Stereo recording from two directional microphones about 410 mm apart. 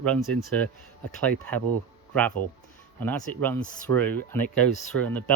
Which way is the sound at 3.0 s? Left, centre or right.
Centre.